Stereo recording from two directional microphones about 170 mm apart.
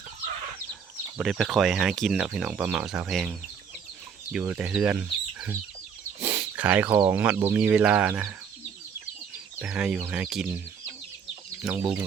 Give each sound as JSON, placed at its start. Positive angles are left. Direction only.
{"t": 1.2, "sound": "speech", "side_deg": 0}
{"t": 9.6, "sound": "speech", "side_deg": -5}
{"t": 11.6, "sound": "speech", "side_deg": -10}